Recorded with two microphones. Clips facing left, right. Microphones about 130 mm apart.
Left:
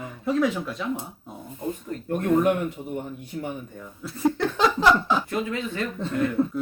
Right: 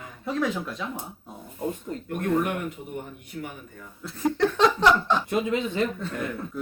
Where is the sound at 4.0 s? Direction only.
Centre (ahead or behind).